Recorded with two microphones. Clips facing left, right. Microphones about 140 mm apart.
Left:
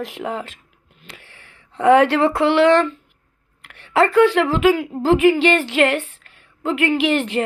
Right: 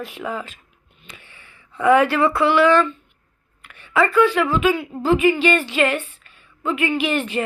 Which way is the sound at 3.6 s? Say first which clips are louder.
Left 3 dB; 85° left.